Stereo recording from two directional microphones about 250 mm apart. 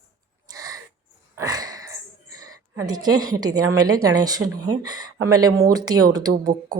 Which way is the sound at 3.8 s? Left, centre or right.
Right.